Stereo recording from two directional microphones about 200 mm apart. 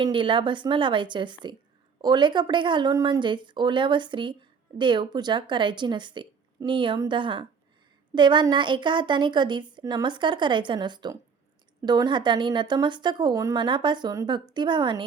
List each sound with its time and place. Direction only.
0.0 s speech: 25° right (ahead or behind)